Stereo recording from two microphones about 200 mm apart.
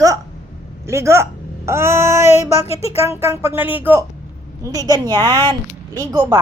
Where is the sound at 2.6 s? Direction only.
30° left (ahead or behind).